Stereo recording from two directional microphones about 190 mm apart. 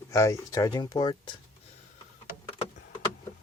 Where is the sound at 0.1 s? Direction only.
15° left (ahead or behind).